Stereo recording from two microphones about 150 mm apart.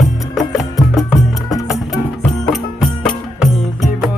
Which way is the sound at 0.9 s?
Centre (ahead or behind).